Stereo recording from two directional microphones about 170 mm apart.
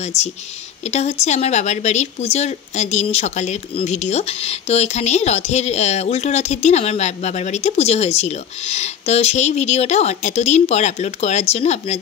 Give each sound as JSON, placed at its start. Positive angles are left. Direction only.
{"t": 0.8, "sound": "a woman's voice", "side_deg": 40}